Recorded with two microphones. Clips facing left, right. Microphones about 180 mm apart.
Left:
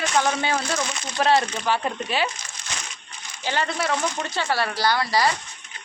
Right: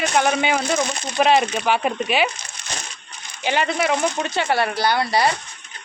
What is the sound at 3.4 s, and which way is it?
Speech, 20° right (ahead or behind).